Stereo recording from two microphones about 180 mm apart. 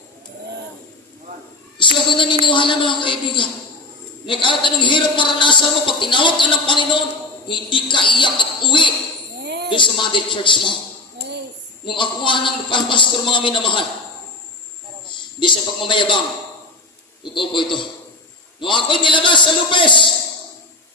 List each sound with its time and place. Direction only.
1.8 s child singing: 30° left (ahead or behind)
2.4 s a man's voice: 25° left (ahead or behind)
9.4 s a sound: 70° right (ahead or behind)
9.6 s a man's voice: 25° left (ahead or behind)
11.9 s a man's voice: 25° left (ahead or behind)
15.4 s a man's voice: 25° left (ahead or behind)
17.3 s a man's voice: 25° left (ahead or behind)